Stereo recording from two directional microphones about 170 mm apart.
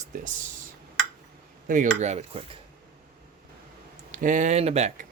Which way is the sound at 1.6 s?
50° right (ahead or behind).